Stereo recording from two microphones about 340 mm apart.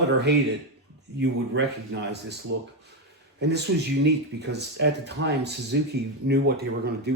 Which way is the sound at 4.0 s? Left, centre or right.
Right.